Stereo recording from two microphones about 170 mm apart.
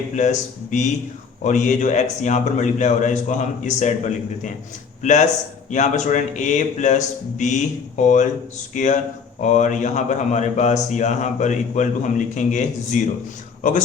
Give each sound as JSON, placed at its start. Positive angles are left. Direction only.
{"t": 0.2, "sound": "a man's voice", "side_deg": 45}
{"t": 5.7, "sound": "a man's voice", "side_deg": 45}